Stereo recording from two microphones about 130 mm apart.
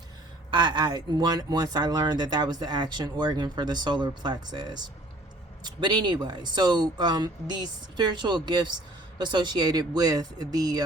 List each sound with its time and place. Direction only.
0.5 s speech: 35° right (ahead or behind)